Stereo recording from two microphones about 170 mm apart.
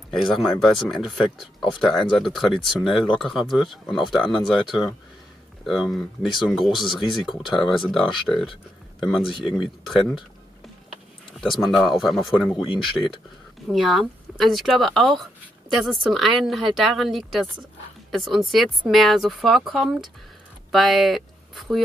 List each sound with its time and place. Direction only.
0.1 s speech: centre (ahead or behind)
11.5 s speech: centre (ahead or behind)
13.0 s speech: 15° left (ahead or behind)
13.7 s speech: centre (ahead or behind)